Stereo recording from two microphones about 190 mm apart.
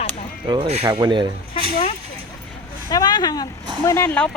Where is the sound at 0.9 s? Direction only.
20° right (ahead or behind).